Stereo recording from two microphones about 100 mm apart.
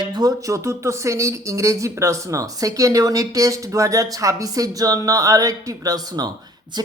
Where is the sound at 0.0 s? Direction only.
45° right (ahead or behind).